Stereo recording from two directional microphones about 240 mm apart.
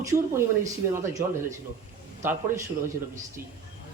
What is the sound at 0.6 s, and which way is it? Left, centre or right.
Speech, centre.